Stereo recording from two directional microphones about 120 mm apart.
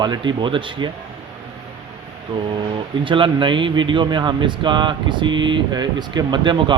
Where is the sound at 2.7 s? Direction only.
45° right (ahead or behind).